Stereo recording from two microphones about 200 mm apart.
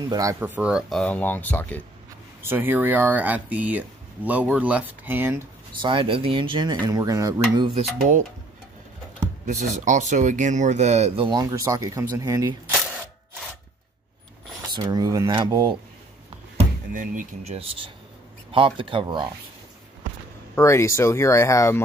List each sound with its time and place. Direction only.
0.1 s speech: 15° right (ahead or behind); by 1.8 s 10° left (ahead or behind)
2.4 s speech: 10° right (ahead or behind)
5.7 s speech: 25° right (ahead or behind)
9.5 s speech: 35° right (ahead or behind); by 12.7 s 15° right (ahead or behind)
14.7 s speech: 20° right (ahead or behind)
16.5 s speech: 40° right (ahead or behind); by 19.3 s 20° right (ahead or behind)
20.5 s speech: 15° left (ahead or behind)